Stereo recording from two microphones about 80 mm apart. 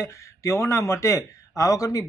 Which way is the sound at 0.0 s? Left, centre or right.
Left.